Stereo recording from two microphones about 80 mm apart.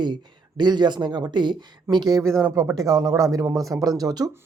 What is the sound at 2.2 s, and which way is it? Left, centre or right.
Speech, right.